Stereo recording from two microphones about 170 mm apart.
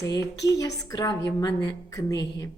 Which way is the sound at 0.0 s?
20° left (ahead or behind).